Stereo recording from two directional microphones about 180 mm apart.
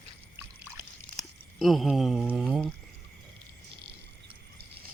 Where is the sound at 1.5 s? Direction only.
Centre (ahead or behind).